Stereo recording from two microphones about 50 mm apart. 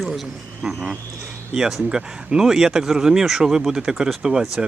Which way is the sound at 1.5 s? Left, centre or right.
Centre.